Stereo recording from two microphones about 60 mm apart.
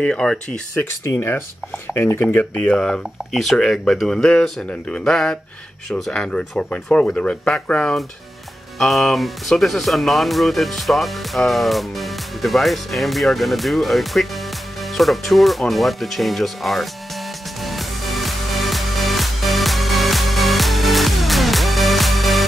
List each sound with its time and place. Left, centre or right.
0.0 s speech: centre
1.0 s speech: left
2.7 s speech: centre
8.7 s speech: centre
17.6 s music: centre